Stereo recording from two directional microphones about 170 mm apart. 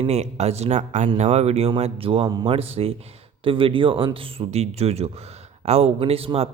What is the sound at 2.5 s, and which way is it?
Speech, 35° right (ahead or behind).